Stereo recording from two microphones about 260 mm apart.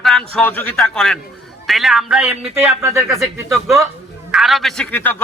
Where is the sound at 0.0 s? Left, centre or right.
Centre.